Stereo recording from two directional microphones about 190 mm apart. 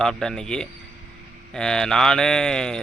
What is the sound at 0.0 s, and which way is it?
Speech, 5° left (ahead or behind).